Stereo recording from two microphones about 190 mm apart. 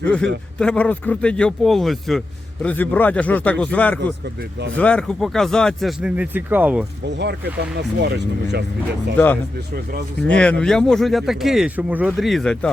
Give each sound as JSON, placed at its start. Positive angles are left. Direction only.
{"t": 0.0, "sound": "a man's voice", "side_deg": 5}
{"t": 7.2, "sound": "speech", "side_deg": -60}
{"t": 9.1, "sound": "a man's voice", "side_deg": 10}